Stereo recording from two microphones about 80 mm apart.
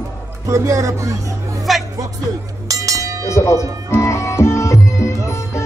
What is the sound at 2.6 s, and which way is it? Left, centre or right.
Music, right.